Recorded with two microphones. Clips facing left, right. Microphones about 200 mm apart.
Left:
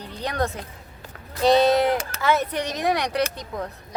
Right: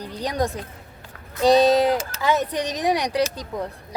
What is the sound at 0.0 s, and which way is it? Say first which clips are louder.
Music: right 2 dB; 15° right (ahead or behind).